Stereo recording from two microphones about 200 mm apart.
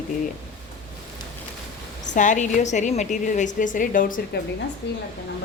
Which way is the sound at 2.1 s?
40° left (ahead or behind).